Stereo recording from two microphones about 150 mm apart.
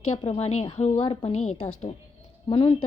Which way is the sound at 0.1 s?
45° left (ahead or behind).